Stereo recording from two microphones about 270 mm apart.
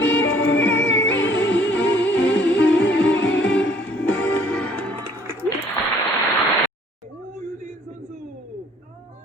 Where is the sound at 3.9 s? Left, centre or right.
Centre.